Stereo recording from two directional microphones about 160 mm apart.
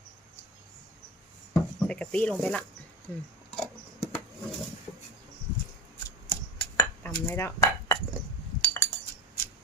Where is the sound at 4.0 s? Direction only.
35° left (ahead or behind).